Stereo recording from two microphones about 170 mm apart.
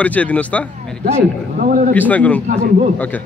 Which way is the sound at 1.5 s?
55° right (ahead or behind).